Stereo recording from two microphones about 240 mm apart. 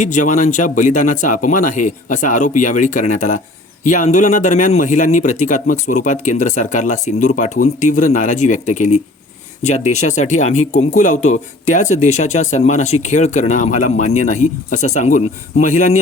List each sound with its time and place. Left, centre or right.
0.0 s a man's voice: left